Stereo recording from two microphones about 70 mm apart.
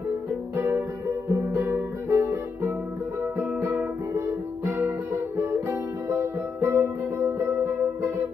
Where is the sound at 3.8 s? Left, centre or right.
Right.